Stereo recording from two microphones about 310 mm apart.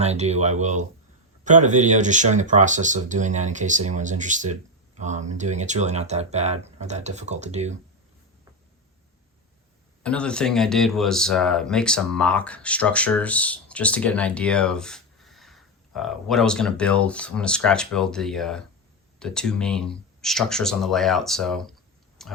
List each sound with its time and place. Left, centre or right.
0.0 s speech: right
10.0 s speech: centre
22.2 s tick-tock: centre